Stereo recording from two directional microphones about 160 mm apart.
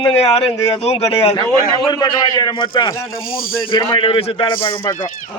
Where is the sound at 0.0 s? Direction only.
35° left (ahead or behind).